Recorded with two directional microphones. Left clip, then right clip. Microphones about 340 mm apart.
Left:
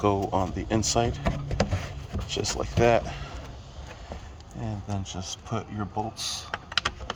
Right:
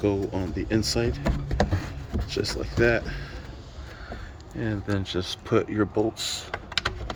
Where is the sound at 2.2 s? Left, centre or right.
Centre.